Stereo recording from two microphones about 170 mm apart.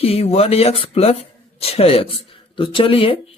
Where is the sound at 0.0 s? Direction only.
35° left (ahead or behind).